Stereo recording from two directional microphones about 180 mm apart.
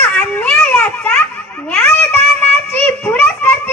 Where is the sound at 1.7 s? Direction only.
10° left (ahead or behind).